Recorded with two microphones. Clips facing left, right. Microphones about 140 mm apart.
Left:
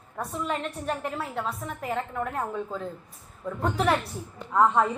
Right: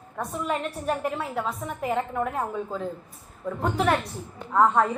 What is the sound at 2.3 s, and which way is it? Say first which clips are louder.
A woman's voice: right 2 dB; 5° right (ahead or behind).